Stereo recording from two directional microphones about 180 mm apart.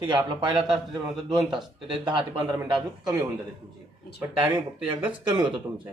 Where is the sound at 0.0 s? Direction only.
25° right (ahead or behind).